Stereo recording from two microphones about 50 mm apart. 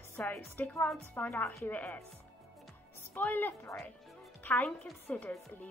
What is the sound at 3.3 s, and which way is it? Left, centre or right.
Speech, left.